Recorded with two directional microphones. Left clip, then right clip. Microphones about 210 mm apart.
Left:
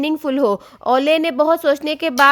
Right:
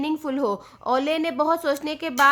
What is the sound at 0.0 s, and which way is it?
A woman's voice, 40° left (ahead or behind).